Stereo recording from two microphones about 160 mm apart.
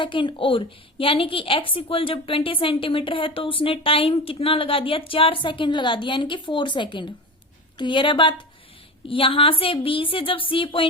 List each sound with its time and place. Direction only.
0.0 s a woman's voice: 30° left (ahead or behind)